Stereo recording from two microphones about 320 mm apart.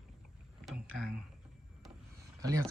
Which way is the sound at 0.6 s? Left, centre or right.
Centre.